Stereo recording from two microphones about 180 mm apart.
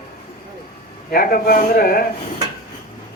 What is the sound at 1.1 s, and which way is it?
Speech, 50° left (ahead or behind).